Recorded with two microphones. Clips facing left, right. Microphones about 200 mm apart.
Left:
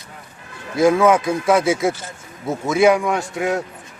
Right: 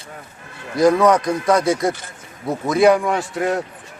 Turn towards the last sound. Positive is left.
turn(degrees=0)  # may be behind; listen again after turning